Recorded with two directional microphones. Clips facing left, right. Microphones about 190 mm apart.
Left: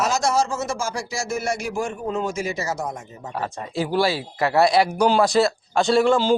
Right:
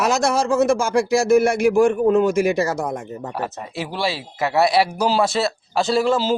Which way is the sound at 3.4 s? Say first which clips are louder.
Left 4 dB; centre (ahead or behind).